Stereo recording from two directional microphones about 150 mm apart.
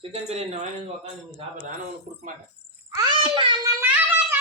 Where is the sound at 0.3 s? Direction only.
50° right (ahead or behind).